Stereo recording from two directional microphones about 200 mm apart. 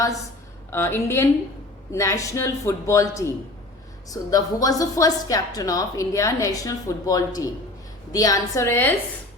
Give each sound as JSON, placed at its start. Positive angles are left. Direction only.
{"t": 0.7, "sound": "a woman's voice", "side_deg": 10}